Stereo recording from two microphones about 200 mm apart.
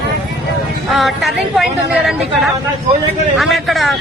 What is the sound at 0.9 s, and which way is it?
Speech, centre (ahead or behind).